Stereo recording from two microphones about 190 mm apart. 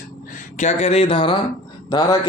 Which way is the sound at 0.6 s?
35° left (ahead or behind).